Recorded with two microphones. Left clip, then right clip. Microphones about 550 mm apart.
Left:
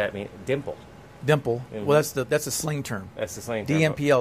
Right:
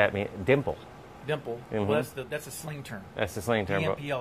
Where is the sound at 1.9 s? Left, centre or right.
Left.